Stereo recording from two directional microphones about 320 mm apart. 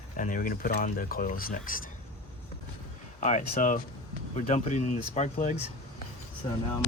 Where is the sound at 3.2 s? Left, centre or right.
Left.